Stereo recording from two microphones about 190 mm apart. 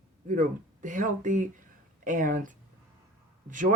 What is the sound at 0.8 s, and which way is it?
Speech, 40° right (ahead or behind).